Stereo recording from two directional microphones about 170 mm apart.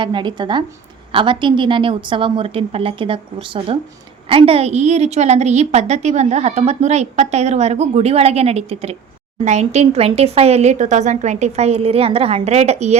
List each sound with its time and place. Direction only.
0.0 s a woman's voice: 30° right (ahead or behind)